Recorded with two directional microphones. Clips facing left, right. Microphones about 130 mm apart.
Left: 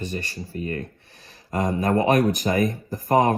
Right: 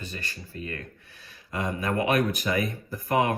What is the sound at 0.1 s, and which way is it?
Speech, 35° left (ahead or behind).